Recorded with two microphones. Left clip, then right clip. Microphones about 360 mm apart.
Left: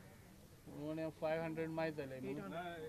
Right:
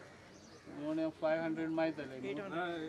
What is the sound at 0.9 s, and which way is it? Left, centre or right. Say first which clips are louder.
Speech: right 6 dB; left.